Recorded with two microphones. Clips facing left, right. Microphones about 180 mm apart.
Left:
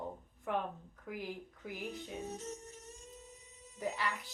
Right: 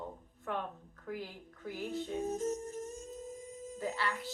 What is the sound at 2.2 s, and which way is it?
Music, 45° right (ahead or behind).